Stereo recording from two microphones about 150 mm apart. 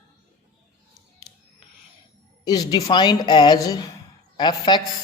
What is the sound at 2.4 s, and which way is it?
A woman's voice, 25° left (ahead or behind).